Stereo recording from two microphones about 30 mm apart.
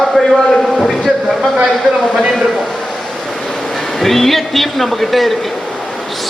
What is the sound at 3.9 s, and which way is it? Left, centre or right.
A man's voice, centre.